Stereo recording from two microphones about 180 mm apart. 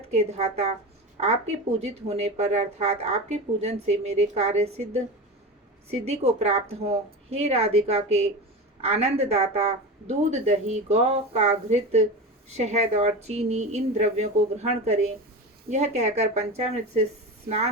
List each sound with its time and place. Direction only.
0.1 s speech: 35° right (ahead or behind)